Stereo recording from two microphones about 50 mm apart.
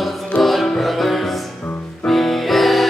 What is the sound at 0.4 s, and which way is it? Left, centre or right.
Music, centre.